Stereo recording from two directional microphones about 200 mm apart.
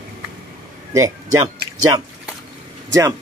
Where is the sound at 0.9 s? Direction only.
15° right (ahead or behind).